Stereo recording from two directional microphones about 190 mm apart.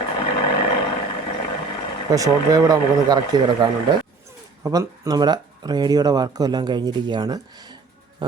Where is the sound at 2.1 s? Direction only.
20° right (ahead or behind).